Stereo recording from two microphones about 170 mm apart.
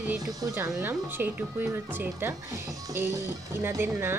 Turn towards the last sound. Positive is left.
turn(degrees=-15)  # may be behind; listen again after turning